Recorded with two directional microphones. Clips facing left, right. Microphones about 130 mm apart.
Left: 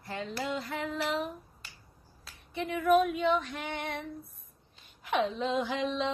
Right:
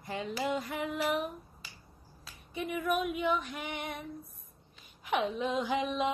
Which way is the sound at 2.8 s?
15° right (ahead or behind).